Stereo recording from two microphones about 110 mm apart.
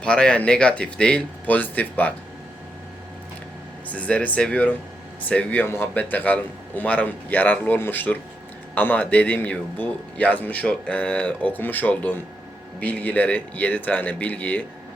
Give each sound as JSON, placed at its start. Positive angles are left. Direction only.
{"t": 0.0, "sound": "a man's voice", "side_deg": 10}
{"t": 3.9, "sound": "a man's voice", "side_deg": 15}